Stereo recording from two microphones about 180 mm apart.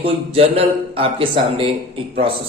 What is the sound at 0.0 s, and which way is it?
A man's voice, 35° right (ahead or behind).